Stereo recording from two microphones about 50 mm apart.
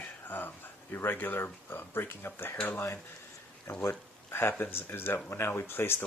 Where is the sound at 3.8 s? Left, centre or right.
Left.